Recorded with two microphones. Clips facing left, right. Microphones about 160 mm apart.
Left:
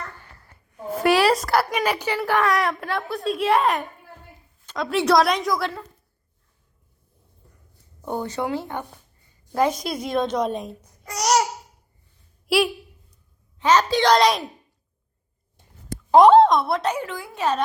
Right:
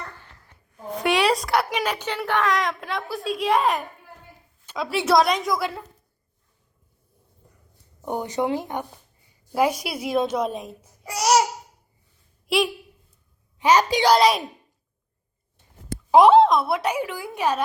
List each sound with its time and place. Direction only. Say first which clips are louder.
0.4 s a woman's voice: left 3 dB; 5° left (ahead or behind)
8.0 s a woman's voice: right 2 dB; 15° right (ahead or behind)
12.5 s a woman's voice: left 2 dB; centre (ahead or behind)
13.6 s a woman's voice: even; 10° right (ahead or behind)
16.1 s a woman's voice: left 1 dB; 5° right (ahead or behind)